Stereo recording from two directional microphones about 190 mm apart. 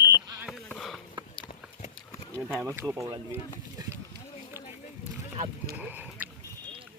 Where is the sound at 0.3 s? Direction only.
Centre (ahead or behind).